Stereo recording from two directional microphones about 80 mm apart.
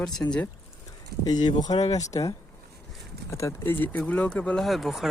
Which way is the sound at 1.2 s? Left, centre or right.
Left.